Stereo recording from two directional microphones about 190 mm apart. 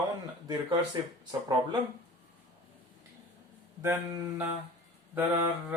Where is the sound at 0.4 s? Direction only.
20° right (ahead or behind).